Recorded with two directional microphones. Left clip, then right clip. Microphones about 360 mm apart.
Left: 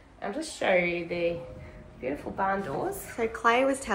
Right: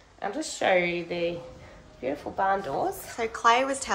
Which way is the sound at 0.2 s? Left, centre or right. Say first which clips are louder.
Right 3 dB; right.